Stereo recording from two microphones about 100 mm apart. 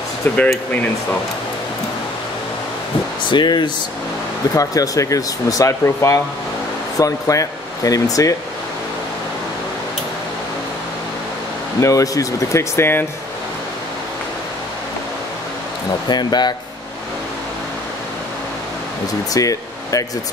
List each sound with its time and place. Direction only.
3.3 s speech: 50° left (ahead or behind)
4.6 s speech: 35° left (ahead or behind)
11.8 s speech: 35° left (ahead or behind)
16.1 s speech: 45° left (ahead or behind)
19.3 s a sound: 35° left (ahead or behind)